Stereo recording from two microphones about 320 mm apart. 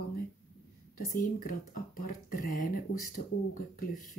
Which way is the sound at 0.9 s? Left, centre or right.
Left.